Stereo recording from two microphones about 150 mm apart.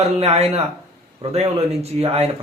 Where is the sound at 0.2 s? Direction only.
45° right (ahead or behind).